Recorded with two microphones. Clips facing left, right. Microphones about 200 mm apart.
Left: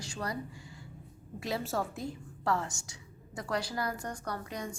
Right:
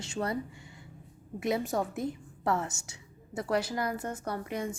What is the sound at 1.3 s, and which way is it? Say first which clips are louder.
A woman's voice: right 4 dB; 20° right (ahead or behind).